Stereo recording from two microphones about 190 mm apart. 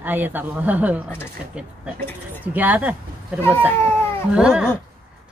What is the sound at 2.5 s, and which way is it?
Speech, 10° right (ahead or behind).